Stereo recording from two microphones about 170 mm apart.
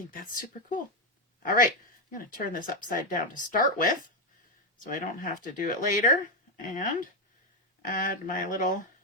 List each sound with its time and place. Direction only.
0.1 s speech: 55° left (ahead or behind)
5.4 s speech: 50° left (ahead or behind)